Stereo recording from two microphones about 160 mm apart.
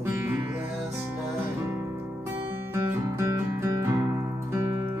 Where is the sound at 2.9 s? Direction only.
15° right (ahead or behind).